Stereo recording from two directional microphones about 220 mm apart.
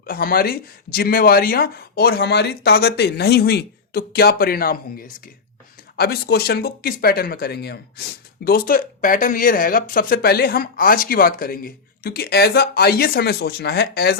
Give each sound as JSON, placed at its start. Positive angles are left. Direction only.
{"t": 0.0, "sound": "speech", "side_deg": 40}